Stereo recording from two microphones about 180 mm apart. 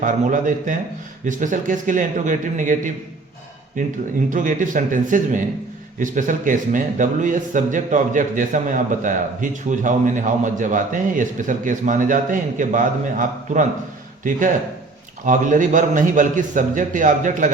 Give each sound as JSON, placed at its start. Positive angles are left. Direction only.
{"t": 0.0, "sound": "a man's voice", "side_deg": -45}